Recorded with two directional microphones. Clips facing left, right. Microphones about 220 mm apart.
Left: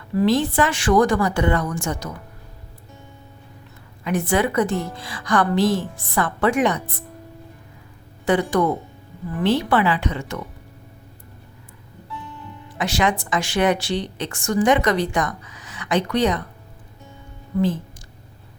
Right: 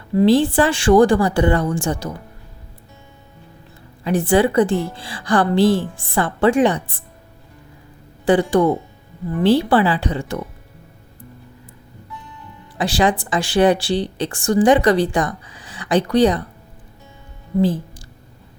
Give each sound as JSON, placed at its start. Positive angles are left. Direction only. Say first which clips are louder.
{"t": 0.1, "sound": "speech", "louder": "right 5 dB", "side_deg": -25}
{"t": 4.0, "sound": "speech", "louder": "right 5 dB", "side_deg": -30}
{"t": 8.2, "sound": "speech", "louder": "right 4 dB", "side_deg": -30}
{"t": 12.7, "sound": "speech", "louder": "right 4 dB", "side_deg": -35}